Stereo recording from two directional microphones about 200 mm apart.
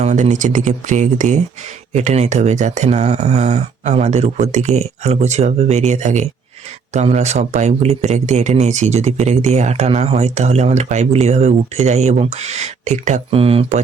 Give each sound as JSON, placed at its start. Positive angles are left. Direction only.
{"t": 0.0, "sound": "speech", "side_deg": -35}